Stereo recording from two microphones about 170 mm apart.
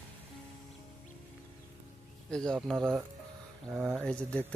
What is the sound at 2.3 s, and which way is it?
Speech, 5° left (ahead or behind).